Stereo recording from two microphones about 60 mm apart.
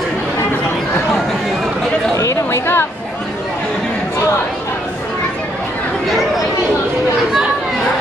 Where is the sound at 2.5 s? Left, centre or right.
Left.